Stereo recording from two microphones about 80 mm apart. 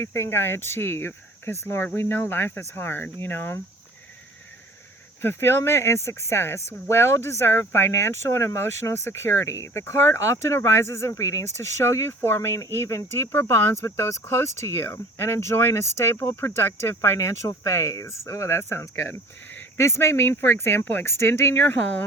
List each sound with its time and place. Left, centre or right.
0.0 s speech: left
5.2 s speech: left